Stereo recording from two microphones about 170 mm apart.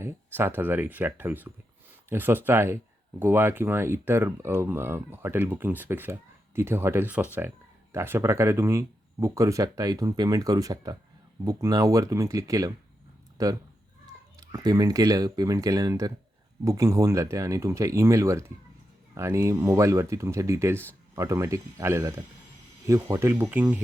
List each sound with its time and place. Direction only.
0.3 s speech: 10° right (ahead or behind)